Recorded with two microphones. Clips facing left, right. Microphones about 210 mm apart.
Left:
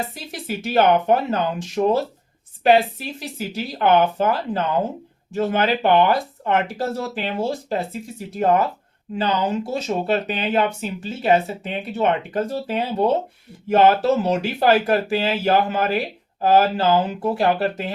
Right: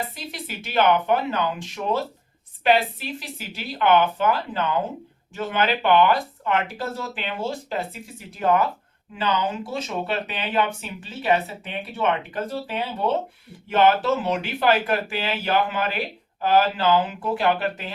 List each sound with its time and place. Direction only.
0.3 s speech: 45° left (ahead or behind)
3.5 s speech: 40° left (ahead or behind)